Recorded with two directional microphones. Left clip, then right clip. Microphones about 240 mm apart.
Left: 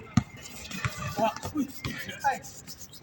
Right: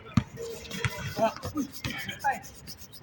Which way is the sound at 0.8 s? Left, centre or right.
Right.